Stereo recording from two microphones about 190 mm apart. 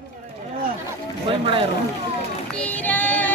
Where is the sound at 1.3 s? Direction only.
30° right (ahead or behind).